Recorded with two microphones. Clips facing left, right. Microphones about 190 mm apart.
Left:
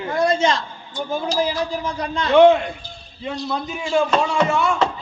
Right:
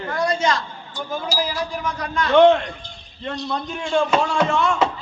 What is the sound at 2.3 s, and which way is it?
A man's voice, 5° left (ahead or behind).